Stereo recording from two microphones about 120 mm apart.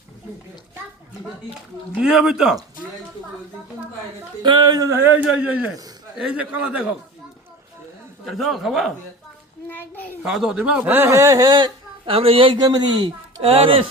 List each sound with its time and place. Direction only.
2.0 s speech: 5° right (ahead or behind)
4.4 s speech: 40° right (ahead or behind)
4.9 s speech: 15° right (ahead or behind)
8.2 s speech: centre (ahead or behind)
9.6 s a sound: 15° left (ahead or behind)
10.2 s speech: 5° right (ahead or behind); by 13.1 s 35° right (ahead or behind)
13.4 s speech: 50° right (ahead or behind)